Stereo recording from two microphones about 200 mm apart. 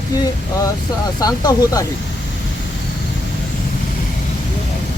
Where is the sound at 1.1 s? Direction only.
20° left (ahead or behind).